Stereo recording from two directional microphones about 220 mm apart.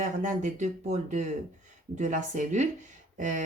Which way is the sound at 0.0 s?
35° right (ahead or behind).